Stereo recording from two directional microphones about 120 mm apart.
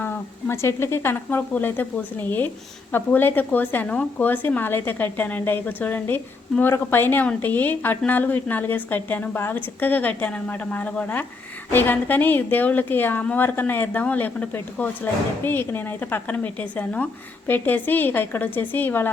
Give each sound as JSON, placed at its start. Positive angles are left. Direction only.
{"t": 0.0, "sound": "a woman's voice", "side_deg": 20}